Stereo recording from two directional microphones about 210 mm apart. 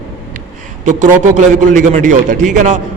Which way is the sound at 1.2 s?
35° right (ahead or behind).